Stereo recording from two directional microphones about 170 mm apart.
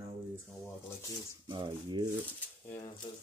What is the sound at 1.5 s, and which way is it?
Speech, 30° right (ahead or behind).